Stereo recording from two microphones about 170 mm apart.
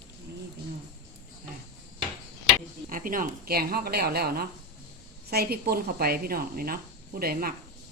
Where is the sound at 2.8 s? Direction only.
55° right (ahead or behind).